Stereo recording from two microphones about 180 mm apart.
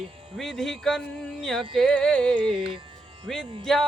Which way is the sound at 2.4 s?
25° right (ahead or behind).